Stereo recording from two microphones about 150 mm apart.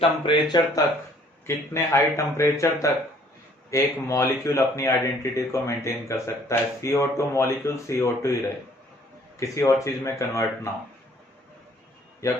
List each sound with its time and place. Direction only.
0.2 s speech: 30° left (ahead or behind)
1.5 s speech: 20° left (ahead or behind)
9.4 s speech: 20° left (ahead or behind)
12.2 s speech: 20° left (ahead or behind)